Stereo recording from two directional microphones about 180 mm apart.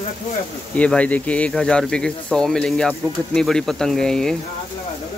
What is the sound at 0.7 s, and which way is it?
Speech, 5° left (ahead or behind).